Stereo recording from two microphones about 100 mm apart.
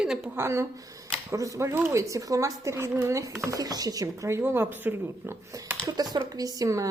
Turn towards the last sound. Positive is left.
turn(degrees=-35)  # may be behind; listen again after turning